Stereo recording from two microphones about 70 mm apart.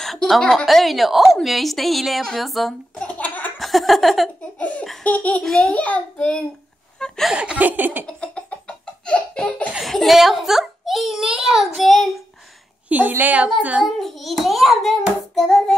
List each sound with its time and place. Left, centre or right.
0.0 s a woman's voice: centre
3.0 s laughter: left
3.5 s a sound: centre
4.6 s laughter: left
6.1 s hands: centre
7.0 s speech: centre
7.3 s a woman's voice: centre
8.1 s a sound: centre
9.8 s a child's voice: centre
12.8 s a woman's voice: right
13.8 s a child's voice: centre
15.3 s hands: centre